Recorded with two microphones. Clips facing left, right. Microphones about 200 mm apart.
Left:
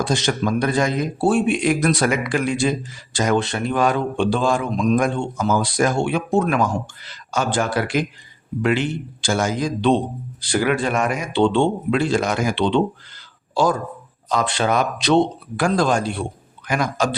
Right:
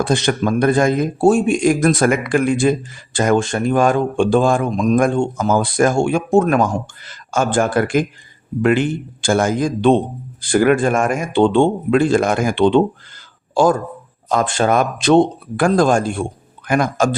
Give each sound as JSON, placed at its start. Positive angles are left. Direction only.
{"t": 0.0, "sound": "speech", "side_deg": -55}